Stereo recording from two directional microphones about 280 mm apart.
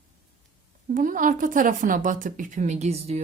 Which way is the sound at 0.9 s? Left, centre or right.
Right.